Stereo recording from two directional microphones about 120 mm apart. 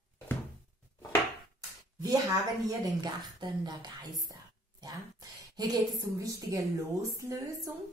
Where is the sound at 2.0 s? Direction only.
30° right (ahead or behind).